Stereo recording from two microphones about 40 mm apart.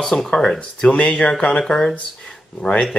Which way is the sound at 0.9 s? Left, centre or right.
Left.